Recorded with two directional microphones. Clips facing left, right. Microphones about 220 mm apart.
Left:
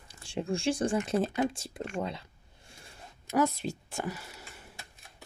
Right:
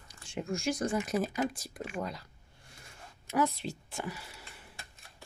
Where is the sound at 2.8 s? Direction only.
45° left (ahead or behind).